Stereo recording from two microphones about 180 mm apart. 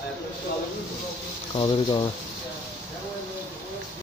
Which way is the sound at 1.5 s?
30° left (ahead or behind).